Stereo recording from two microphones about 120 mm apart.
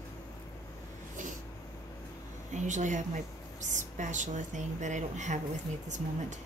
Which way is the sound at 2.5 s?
90° right.